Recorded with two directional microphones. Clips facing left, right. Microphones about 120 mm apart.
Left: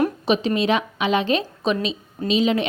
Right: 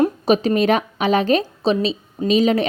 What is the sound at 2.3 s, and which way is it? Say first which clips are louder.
Speech: right 3 dB; 45° right (ahead or behind).